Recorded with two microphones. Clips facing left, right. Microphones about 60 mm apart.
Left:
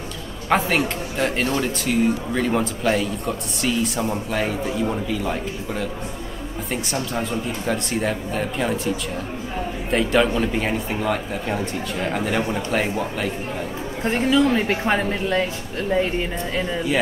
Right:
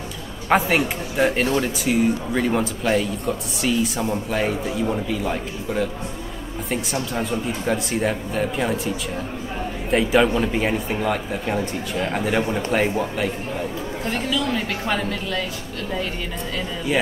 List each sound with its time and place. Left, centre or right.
0.5 s speech: centre
14.0 s a woman's voice: left